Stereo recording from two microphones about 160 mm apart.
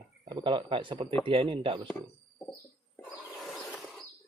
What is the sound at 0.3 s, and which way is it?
Speech, 30° right (ahead or behind).